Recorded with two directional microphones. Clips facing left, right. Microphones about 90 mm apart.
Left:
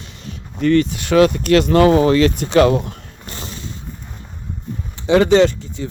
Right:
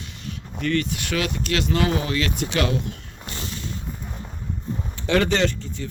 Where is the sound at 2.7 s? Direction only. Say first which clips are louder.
Left 6 dB; 40° left (ahead or behind).